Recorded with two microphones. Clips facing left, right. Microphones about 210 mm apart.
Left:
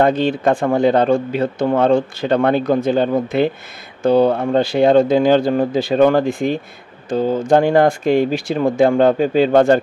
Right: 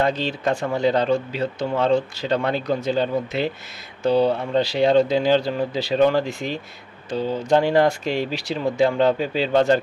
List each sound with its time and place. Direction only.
0.0 s speech: 55° left (ahead or behind)